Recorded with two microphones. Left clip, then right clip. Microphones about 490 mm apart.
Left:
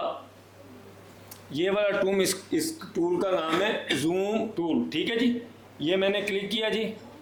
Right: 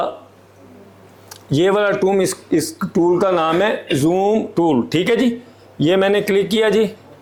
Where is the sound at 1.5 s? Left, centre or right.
Right.